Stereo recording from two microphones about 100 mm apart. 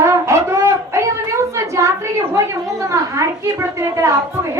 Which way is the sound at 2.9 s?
30° right (ahead or behind).